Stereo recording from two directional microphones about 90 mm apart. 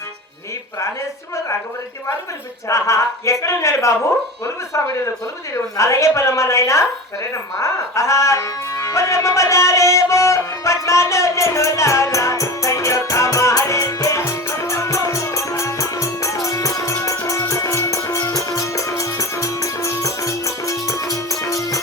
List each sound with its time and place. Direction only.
2.6 s a man's voice: 35° left (ahead or behind)
7.6 s music: 35° left (ahead or behind)